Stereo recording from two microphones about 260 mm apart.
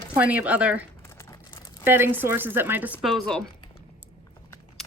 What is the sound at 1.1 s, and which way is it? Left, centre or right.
Crumpling, centre.